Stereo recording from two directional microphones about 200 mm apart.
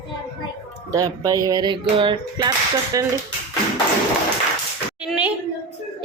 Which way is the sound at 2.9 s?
15° right (ahead or behind).